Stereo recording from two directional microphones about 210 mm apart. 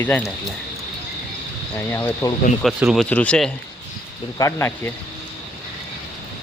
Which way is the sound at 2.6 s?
Centre (ahead or behind).